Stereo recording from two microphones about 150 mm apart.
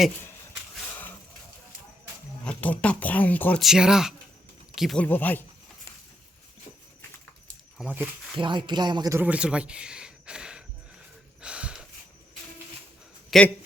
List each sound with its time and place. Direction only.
2.4 s speech: 10° left (ahead or behind)
3.6 s speech: 5° right (ahead or behind)
5.0 s speech: 10° left (ahead or behind)
7.8 s speech: 10° right (ahead or behind)
8.4 s speech: 30° right (ahead or behind)
9.1 s speech: 10° right (ahead or behind)
11.3 s a sound: 5° right (ahead or behind)
13.3 s speech: centre (ahead or behind)